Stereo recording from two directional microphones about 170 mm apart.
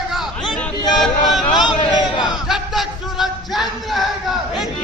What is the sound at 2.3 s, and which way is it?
Music, centre (ahead or behind).